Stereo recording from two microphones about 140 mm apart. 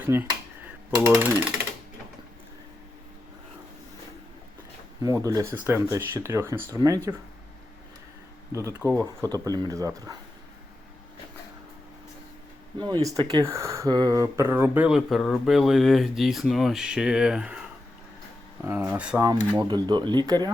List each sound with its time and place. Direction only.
0.0 s speech: 15° right (ahead or behind)
5.2 s speech: 20° right (ahead or behind)
8.5 s speech: 20° right (ahead or behind)
12.8 s speech: 25° right (ahead or behind)
14.8 s speech: centre (ahead or behind)
18.8 s speech: 10° right (ahead or behind)
19.5 s speech: 30° right (ahead or behind)